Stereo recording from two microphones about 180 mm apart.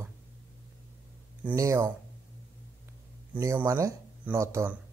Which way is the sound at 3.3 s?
15° right (ahead or behind).